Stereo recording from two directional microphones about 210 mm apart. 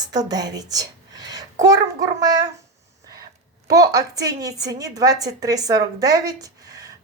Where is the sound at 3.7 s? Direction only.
15° right (ahead or behind).